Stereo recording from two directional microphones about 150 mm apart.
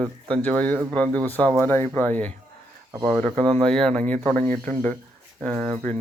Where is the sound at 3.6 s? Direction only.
5° left (ahead or behind).